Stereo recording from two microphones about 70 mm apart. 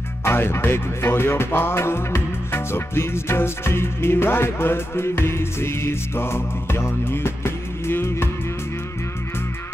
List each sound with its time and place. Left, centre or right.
0.2 s music: left